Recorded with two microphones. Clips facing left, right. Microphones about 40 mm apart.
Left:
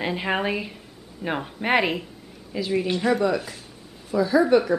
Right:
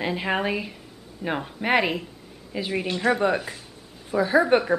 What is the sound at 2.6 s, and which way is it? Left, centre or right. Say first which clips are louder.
Speech: left 1 dB; right.